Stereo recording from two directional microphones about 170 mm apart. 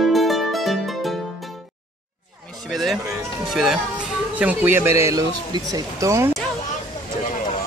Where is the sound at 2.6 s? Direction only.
Centre (ahead or behind).